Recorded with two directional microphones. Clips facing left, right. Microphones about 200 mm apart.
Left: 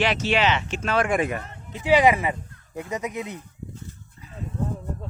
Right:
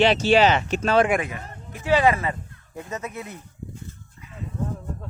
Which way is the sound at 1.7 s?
15° left (ahead or behind).